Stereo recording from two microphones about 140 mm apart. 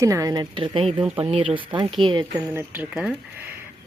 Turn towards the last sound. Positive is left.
turn(degrees=-5)  # may be behind; listen again after turning